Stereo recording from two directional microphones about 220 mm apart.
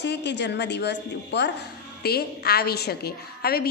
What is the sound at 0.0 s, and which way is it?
A woman's voice, 50° left (ahead or behind).